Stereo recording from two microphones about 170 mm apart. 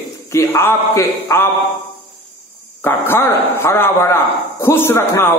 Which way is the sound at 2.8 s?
15° left (ahead or behind).